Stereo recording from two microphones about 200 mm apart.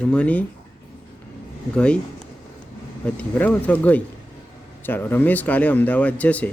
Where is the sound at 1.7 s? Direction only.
5° left (ahead or behind).